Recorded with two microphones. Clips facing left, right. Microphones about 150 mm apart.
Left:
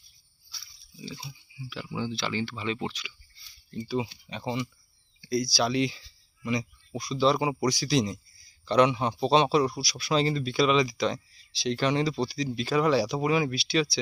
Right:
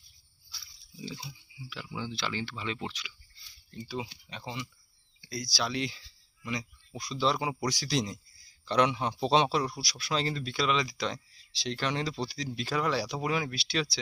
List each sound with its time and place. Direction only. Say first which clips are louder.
1.2 s speech: left 3 dB; 10° left (ahead or behind)
5.5 s speech: left 3 dB; 10° left (ahead or behind)
7.0 s speech: left 5 dB; 5° left (ahead or behind)